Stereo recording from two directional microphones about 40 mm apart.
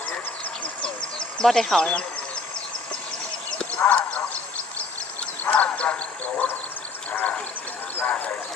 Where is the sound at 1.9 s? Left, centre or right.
Left.